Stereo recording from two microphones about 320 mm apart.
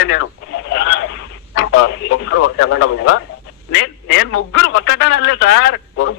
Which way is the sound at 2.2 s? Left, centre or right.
Left.